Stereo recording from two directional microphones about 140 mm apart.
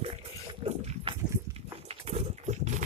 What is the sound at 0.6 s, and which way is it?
Pig, 45° right (ahead or behind).